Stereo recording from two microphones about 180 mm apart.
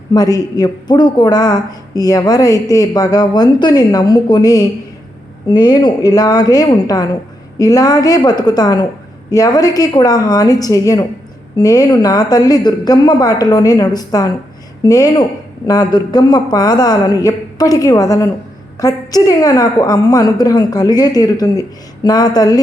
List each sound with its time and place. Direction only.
0.1 s speech: 20° left (ahead or behind)